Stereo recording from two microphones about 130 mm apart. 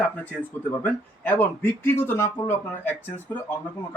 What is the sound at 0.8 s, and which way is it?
Speech, 15° left (ahead or behind).